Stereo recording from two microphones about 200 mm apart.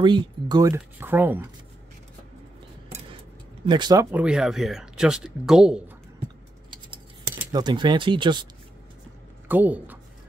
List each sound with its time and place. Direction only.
0.0 s speech: 20° right (ahead or behind)
3.6 s speech: 20° right (ahead or behind); by 5.9 s 5° right (ahead or behind)
7.5 s speech: 20° right (ahead or behind)
9.5 s speech: 10° right (ahead or behind)